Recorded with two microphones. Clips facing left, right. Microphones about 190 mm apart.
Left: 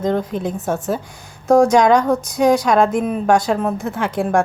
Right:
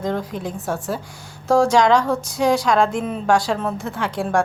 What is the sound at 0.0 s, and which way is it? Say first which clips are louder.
Speech: left 5 dB; 20° left (ahead or behind).